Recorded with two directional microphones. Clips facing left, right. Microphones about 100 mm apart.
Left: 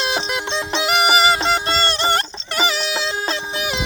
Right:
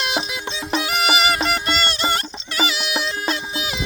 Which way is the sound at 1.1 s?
30° left (ahead or behind).